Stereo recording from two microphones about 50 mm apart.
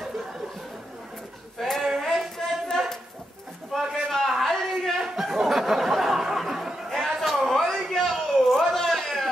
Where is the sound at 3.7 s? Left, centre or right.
Centre.